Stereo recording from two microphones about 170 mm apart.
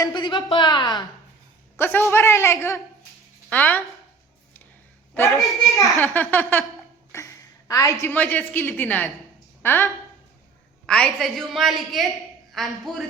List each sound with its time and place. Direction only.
0.0 s a woman's voice: 25° left (ahead or behind)
1.7 s a man's voice: 15° left (ahead or behind)
5.4 s a woman's voice: centre (ahead or behind)
6.0 s a man's voice: 10° left (ahead or behind)